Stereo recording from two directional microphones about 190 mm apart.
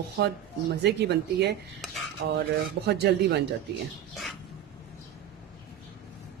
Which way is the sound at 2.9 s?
60° right (ahead or behind).